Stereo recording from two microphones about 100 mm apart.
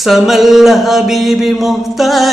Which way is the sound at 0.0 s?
Centre (ahead or behind).